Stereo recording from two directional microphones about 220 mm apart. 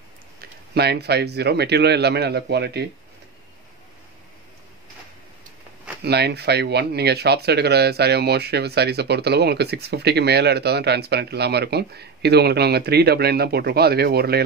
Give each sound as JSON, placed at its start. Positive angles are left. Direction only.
{"t": 0.4, "sound": "speech", "side_deg": -50}
{"t": 6.0, "sound": "speech", "side_deg": -50}